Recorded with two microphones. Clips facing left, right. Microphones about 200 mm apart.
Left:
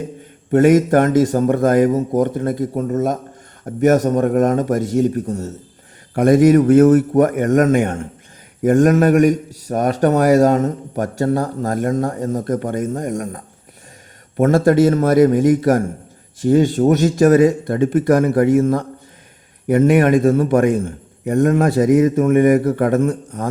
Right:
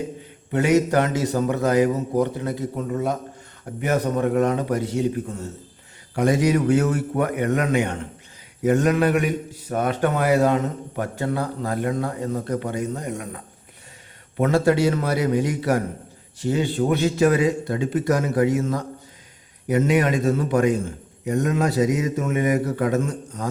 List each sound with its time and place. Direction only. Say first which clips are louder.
0.5 s a man's voice: left 7 dB; 50° left (ahead or behind)